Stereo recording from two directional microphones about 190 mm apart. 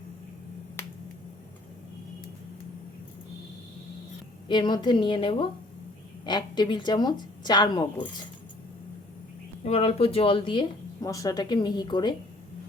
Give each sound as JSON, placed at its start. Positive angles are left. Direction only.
{"t": 0.8, "sound": "finger snapping", "side_deg": 10}
{"t": 4.4, "sound": "speech", "side_deg": 25}
{"t": 9.6, "sound": "speech", "side_deg": 30}